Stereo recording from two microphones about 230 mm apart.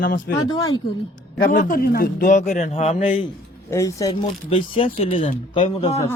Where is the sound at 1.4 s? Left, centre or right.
Left.